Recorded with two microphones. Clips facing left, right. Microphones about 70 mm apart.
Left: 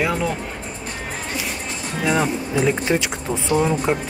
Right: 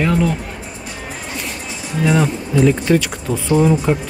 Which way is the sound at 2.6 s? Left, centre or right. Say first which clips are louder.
Right 6 dB; centre.